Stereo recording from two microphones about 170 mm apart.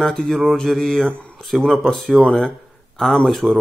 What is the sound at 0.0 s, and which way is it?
Speech, 5° left (ahead or behind).